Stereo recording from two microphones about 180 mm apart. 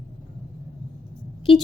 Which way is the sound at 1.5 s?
30° left (ahead or behind).